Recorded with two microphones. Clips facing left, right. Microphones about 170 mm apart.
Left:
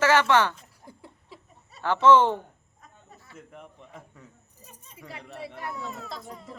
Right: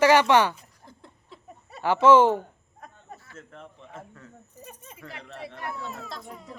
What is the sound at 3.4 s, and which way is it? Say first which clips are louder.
Speech: right 1 dB; 15° left (ahead or behind).